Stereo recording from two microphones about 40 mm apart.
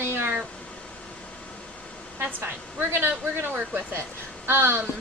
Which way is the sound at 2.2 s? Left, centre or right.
Right.